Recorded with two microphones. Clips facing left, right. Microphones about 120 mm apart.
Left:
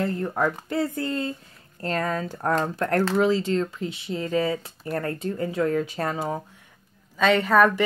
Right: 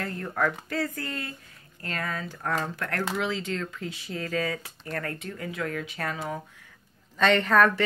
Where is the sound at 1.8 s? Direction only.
40° left (ahead or behind).